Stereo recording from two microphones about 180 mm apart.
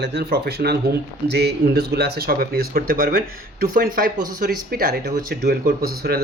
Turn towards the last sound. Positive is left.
turn(degrees=-60)  # may be behind; listen again after turning